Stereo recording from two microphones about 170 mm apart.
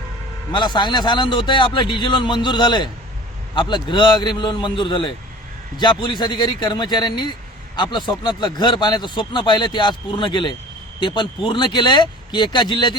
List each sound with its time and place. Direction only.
0.5 s speech: 25° left (ahead or behind)